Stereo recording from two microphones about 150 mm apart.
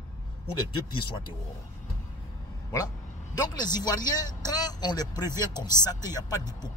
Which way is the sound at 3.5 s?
25° left (ahead or behind).